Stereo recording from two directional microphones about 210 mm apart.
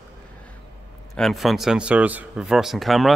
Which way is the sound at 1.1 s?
Centre (ahead or behind).